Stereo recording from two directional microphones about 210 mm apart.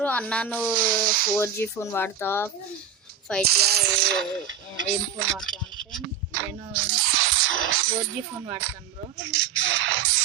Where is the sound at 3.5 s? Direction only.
50° right (ahead or behind).